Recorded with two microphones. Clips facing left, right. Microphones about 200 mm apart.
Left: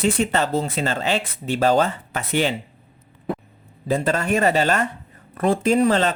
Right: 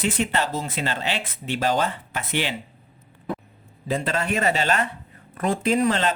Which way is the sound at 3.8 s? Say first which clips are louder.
Left 4 dB; 40° left (ahead or behind).